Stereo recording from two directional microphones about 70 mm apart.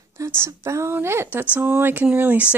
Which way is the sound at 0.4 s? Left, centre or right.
Right.